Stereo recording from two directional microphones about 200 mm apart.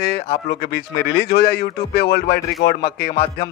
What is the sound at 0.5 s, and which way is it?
Speech, 55° left (ahead or behind).